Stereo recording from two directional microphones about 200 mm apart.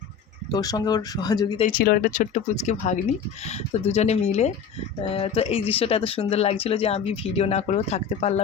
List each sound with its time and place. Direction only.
0.5 s speech: 20° left (ahead or behind)
1.6 s speech: 50° left (ahead or behind); by 8.4 s 30° left (ahead or behind)